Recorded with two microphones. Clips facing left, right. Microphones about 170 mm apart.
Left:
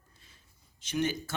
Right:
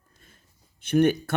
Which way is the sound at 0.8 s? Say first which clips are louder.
Right 11 dB; 60° right (ahead or behind).